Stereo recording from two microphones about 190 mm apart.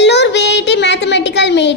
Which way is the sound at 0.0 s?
65° left (ahead or behind).